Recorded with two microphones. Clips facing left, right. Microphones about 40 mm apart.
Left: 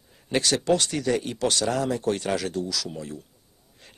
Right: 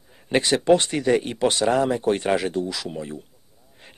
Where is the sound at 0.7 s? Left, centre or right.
Right.